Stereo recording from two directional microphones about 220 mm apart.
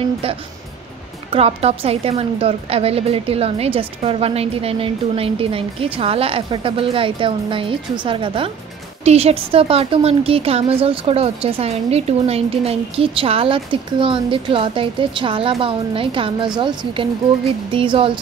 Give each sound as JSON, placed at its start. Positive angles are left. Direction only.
{"t": 1.3, "sound": "a woman's voice", "side_deg": -25}